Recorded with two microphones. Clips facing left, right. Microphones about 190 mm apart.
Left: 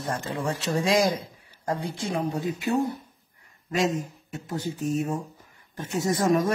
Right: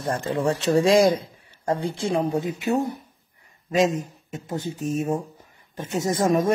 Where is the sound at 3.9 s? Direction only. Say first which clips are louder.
Right 1 dB; 20° right (ahead or behind).